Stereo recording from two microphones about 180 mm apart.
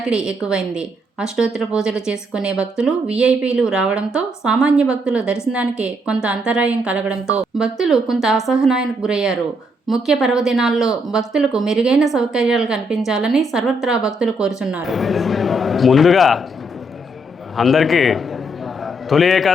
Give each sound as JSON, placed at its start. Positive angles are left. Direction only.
{"t": 0.0, "sound": "speech", "side_deg": -5}
{"t": 17.6, "sound": "speech", "side_deg": 0}